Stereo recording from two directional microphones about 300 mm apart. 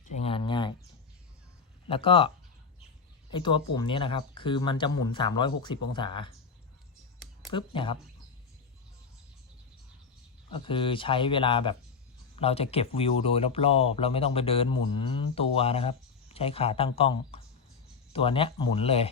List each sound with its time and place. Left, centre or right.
0.0 s a sound: left
1.9 s speech: centre
3.3 s speech: centre
7.5 s speech: centre
10.5 s speech: centre